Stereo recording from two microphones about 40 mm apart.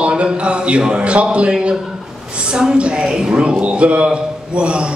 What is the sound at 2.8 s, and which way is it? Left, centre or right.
A man's voice, right.